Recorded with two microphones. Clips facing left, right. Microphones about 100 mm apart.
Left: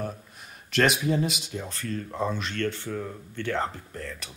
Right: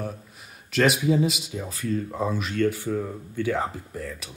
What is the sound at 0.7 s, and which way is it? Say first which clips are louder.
Speech: right 2 dB; centre (ahead or behind).